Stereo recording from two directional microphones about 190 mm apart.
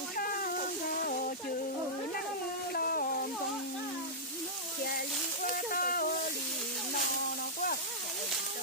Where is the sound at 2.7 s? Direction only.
50° left (ahead or behind).